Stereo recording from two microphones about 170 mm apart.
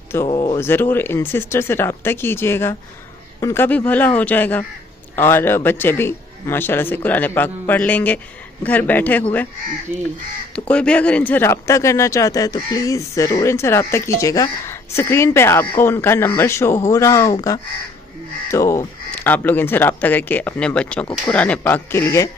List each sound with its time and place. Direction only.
0.3 s speech: 25° left (ahead or behind)
0.6 s speech: 10° left (ahead or behind)
9.9 s speech: 10° right (ahead or behind)
10.5 s speech: 5° left (ahead or behind)